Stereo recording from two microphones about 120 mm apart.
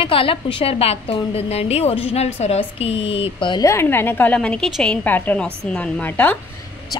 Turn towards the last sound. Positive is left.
turn(degrees=10)  # may be behind; listen again after turning